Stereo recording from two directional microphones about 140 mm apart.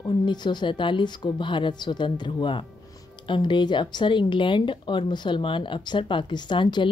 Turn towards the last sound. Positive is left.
turn(degrees=35)  # may be behind; listen again after turning